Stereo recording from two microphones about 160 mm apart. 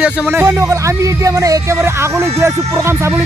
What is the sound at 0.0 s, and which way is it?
A man's voice, 10° right (ahead or behind).